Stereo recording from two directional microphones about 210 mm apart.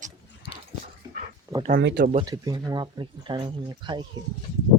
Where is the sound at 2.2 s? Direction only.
15° right (ahead or behind).